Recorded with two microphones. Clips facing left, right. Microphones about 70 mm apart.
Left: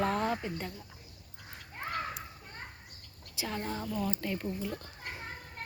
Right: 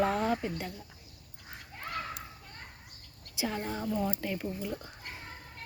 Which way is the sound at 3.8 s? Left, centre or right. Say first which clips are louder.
Right 5 dB; right.